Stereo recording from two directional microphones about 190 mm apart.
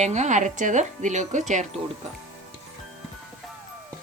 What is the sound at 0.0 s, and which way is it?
Speech, 40° right (ahead or behind).